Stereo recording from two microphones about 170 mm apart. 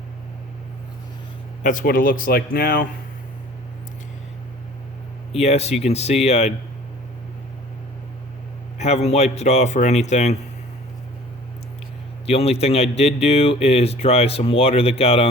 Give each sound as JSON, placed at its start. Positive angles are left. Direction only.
{"t": 1.6, "sound": "speech", "side_deg": 55}
{"t": 5.3, "sound": "speech", "side_deg": 40}
{"t": 8.8, "sound": "speech", "side_deg": 40}
{"t": 12.2, "sound": "speech", "side_deg": 35}